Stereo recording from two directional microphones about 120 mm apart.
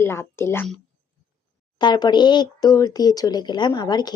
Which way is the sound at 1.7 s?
35° left (ahead or behind).